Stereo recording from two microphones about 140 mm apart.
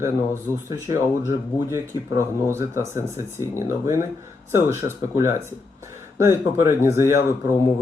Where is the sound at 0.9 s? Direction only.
20° right (ahead or behind).